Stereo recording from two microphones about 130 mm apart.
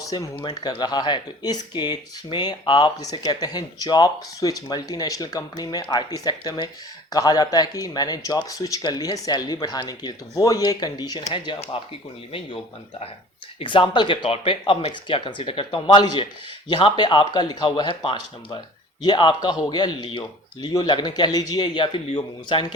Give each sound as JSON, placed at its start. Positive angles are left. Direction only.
{"t": 0.0, "sound": "speech", "side_deg": 25}
{"t": 11.8, "sound": "speech", "side_deg": 45}
{"t": 13.6, "sound": "speech", "side_deg": 40}